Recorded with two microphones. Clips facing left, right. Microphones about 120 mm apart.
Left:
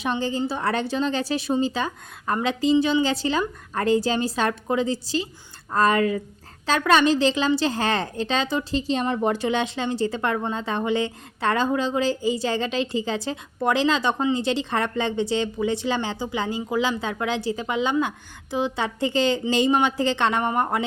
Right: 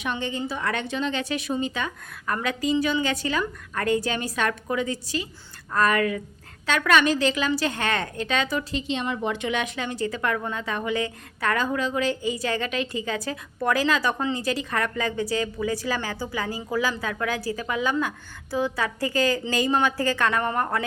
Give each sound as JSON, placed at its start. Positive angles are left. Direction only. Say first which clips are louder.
{"t": 0.0, "sound": "a woman's voice", "louder": "left 4 dB", "side_deg": 30}